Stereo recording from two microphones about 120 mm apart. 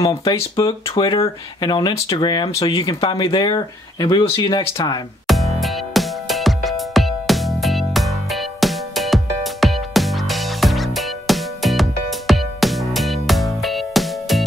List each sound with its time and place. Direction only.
0.8 s speech: 30° left (ahead or behind)
2.5 s speech: 30° left (ahead or behind)
2.8 s speech: 45° left (ahead or behind)
5.2 s music: centre (ahead or behind)